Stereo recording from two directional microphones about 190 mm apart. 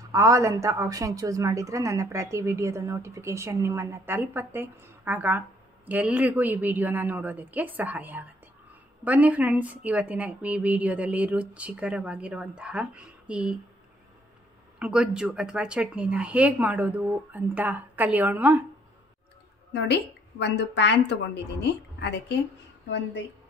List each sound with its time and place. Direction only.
0.1 s a woman's voice: 15° right (ahead or behind)
14.8 s a woman's voice: 5° right (ahead or behind)
19.7 s a woman's voice: 65° left (ahead or behind)